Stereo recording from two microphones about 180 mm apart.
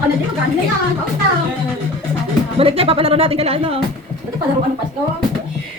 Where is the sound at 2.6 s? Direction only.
30° right (ahead or behind).